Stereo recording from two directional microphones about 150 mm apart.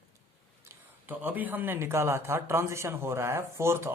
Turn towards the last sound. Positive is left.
turn(degrees=-15)  # may be behind; listen again after turning